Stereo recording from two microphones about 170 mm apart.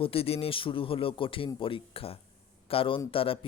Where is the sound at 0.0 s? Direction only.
35° left (ahead or behind).